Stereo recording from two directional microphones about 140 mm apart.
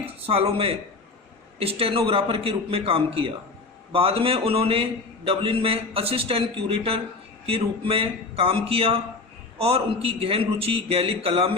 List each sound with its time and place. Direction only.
0.0 s a man's voice: 45° right (ahead or behind)